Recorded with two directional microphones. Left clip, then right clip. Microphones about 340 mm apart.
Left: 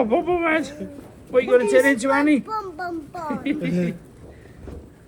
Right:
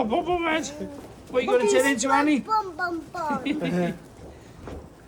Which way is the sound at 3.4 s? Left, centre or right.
Centre.